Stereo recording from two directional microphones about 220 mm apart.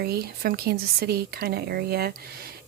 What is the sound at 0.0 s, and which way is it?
Speech, 45° right (ahead or behind).